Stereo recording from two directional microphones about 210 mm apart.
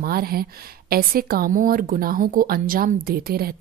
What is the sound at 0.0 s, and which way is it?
A woman's voice, 45° right (ahead or behind).